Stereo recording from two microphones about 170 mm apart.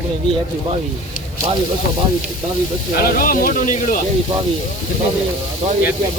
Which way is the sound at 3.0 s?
55° left (ahead or behind).